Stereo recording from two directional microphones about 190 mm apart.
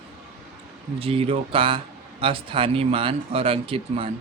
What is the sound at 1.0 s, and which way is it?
Speech, 30° right (ahead or behind).